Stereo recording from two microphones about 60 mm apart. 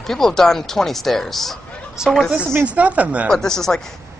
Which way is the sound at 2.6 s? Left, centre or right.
Right.